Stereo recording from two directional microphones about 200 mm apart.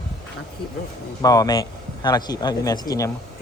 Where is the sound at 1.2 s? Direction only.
20° left (ahead or behind).